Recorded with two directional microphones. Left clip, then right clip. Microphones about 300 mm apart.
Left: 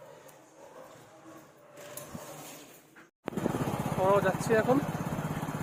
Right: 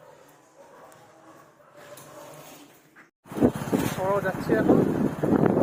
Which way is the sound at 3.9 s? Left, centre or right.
Centre.